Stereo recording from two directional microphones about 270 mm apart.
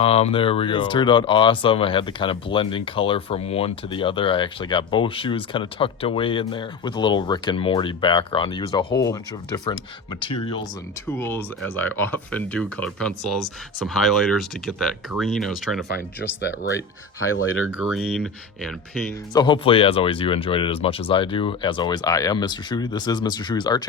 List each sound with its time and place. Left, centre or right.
0.0 s speech: left; by 15.8 s centre
16.7 s speech: left
17.7 s speech: centre
19.3 s speech: centre